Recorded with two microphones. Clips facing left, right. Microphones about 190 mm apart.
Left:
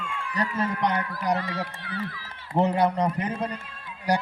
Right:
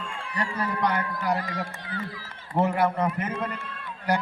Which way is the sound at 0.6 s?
20° left (ahead or behind).